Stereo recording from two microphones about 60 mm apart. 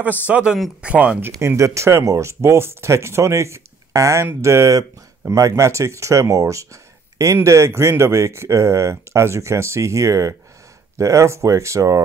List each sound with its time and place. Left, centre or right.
0.3 s speech: centre
1.6 s speech: right
5.3 s speech: right
7.4 s speech: right